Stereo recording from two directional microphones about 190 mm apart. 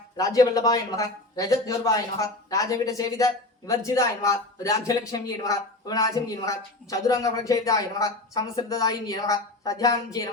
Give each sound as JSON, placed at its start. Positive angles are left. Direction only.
{"t": 0.2, "sound": "speech", "side_deg": 20}